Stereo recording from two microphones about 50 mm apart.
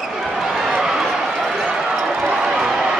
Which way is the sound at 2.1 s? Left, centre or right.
Right.